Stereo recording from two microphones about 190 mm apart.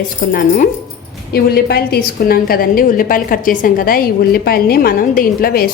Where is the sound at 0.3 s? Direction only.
45° left (ahead or behind).